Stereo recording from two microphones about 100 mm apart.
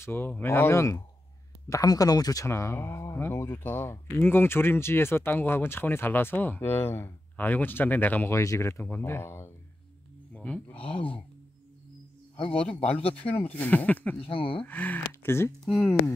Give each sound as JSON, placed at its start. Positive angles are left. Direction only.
{"t": 0.0, "sound": "speech", "side_deg": 20}
{"t": 10.3, "sound": "a sound", "side_deg": 10}
{"t": 10.8, "sound": "speech", "side_deg": 65}
{"t": 12.4, "sound": "speech", "side_deg": 60}
{"t": 13.2, "sound": "speech", "side_deg": 15}
{"t": 14.2, "sound": "speech", "side_deg": 60}
{"t": 14.6, "sound": "speech", "side_deg": 15}
{"t": 15.6, "sound": "speech", "side_deg": 5}